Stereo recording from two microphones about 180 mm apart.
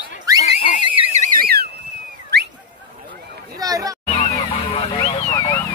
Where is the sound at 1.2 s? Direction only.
55° right (ahead or behind).